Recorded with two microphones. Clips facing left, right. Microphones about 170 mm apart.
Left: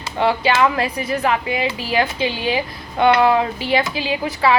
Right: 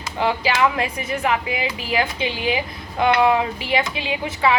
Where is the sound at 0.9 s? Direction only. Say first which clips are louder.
Left 2 dB; 30° left (ahead or behind).